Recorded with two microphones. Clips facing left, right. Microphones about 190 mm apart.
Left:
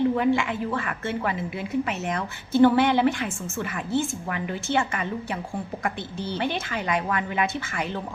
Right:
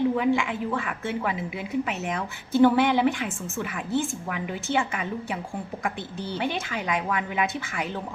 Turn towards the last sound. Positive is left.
turn(degrees=-5)  # may be behind; listen again after turning